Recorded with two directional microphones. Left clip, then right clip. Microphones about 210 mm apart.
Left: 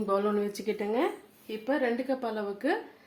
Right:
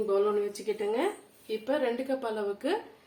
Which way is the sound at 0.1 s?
45° left (ahead or behind).